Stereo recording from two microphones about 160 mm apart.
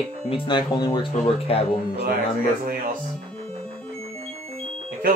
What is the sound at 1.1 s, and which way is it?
Speech, 40° left (ahead or behind).